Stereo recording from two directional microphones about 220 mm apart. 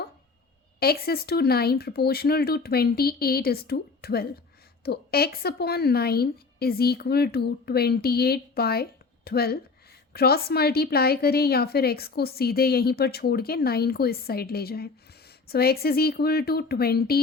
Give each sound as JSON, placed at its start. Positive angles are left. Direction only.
{"t": 0.8, "sound": "a woman's voice", "side_deg": 45}